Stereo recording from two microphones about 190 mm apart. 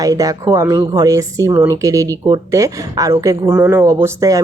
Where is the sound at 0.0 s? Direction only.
20° right (ahead or behind).